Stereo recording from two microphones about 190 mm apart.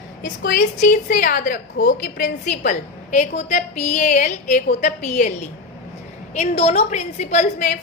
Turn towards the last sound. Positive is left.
turn(degrees=40)  # may be behind; listen again after turning